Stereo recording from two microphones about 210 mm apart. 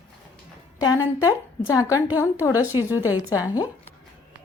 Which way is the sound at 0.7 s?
15° left (ahead or behind).